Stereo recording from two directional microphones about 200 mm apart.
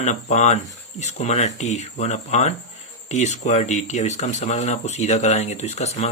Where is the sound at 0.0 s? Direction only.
35° left (ahead or behind).